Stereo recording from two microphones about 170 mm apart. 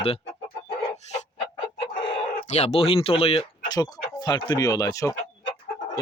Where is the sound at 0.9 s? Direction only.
40° left (ahead or behind).